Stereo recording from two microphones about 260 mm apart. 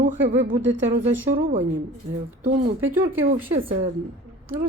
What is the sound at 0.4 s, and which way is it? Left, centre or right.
Speech, right.